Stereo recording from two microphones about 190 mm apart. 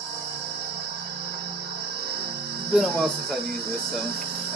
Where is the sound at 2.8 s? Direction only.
Centre (ahead or behind).